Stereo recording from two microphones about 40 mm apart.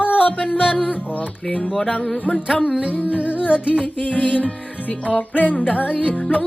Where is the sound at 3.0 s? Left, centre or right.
Right.